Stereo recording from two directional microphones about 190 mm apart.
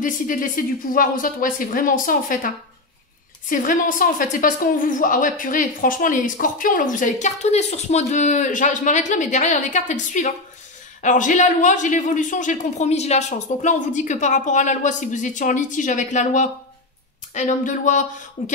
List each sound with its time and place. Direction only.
0.0 s a woman's voice: 45° left (ahead or behind)